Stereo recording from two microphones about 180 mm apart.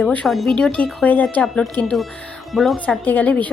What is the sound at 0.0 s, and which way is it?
A woman's voice, 5° left (ahead or behind).